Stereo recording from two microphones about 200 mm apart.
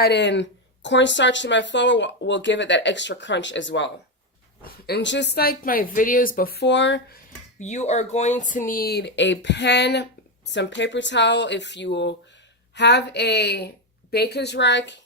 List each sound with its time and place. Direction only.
0.0 s speech: 60° left (ahead or behind)
4.6 s speech: 55° left (ahead or behind)
7.6 s speech: 35° left (ahead or behind); by 15.0 s 60° left (ahead or behind)